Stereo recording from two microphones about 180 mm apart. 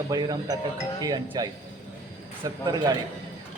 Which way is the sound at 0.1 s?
20° right (ahead or behind).